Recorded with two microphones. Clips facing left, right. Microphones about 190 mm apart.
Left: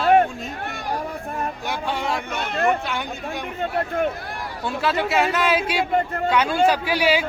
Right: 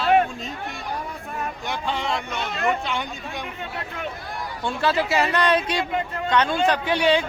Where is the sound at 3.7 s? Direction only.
50° left (ahead or behind).